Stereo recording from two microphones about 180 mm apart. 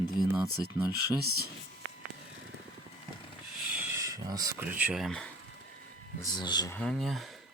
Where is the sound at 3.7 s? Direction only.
15° right (ahead or behind); by 5.3 s centre (ahead or behind).